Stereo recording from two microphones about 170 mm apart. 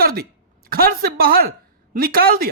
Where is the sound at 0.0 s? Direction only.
60° right (ahead or behind).